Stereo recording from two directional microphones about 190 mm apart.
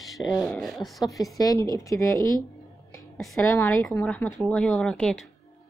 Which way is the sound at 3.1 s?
5° left (ahead or behind).